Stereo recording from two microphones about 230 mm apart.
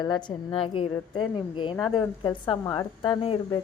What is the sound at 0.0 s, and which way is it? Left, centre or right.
A woman's voice, centre.